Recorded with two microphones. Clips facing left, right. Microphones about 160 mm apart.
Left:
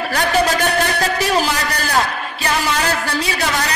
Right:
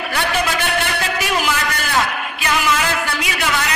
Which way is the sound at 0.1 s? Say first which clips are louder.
Left 4 dB; 40° left (ahead or behind).